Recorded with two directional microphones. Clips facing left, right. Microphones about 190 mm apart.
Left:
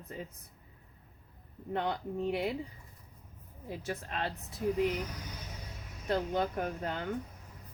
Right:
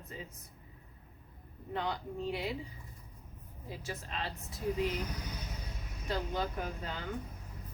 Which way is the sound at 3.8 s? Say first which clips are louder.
Left 4 dB; 55° left (ahead or behind).